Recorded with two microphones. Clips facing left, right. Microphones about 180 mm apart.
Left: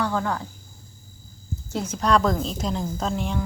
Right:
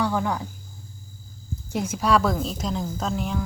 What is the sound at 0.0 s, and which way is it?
Speech, 15° right (ahead or behind).